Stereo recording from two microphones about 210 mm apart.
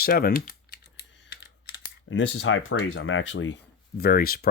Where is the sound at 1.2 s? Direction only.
55° left (ahead or behind).